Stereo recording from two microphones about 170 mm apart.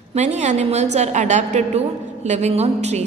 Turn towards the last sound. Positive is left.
turn(degrees=-40)  # may be behind; listen again after turning